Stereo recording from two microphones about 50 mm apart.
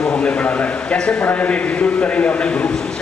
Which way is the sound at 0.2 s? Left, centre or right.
Left.